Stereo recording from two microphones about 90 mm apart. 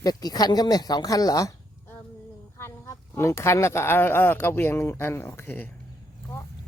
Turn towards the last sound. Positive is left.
turn(degrees=25)  # may be behind; listen again after turning